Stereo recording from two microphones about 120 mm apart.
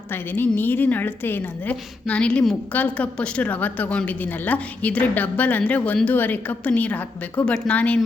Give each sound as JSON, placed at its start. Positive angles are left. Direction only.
{"t": 0.1, "sound": "a woman's voice", "side_deg": 15}